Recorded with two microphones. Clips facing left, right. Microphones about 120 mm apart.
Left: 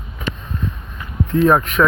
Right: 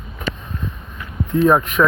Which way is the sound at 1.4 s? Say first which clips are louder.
Even; 5° right (ahead or behind).